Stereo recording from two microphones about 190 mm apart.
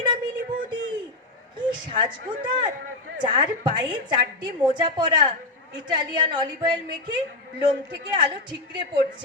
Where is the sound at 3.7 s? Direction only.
25° right (ahead or behind).